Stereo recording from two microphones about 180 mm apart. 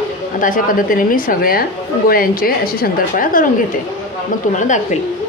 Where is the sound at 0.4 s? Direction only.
50° left (ahead or behind).